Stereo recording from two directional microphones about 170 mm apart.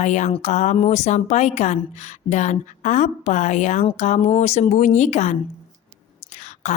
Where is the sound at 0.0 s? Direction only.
45° left (ahead or behind).